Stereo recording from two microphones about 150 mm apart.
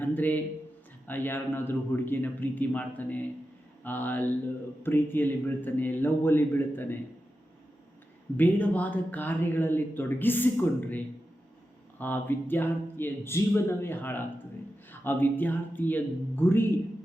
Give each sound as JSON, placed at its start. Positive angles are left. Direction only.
{"t": 0.0, "sound": "speech", "side_deg": 10}
{"t": 8.4, "sound": "speech", "side_deg": 10}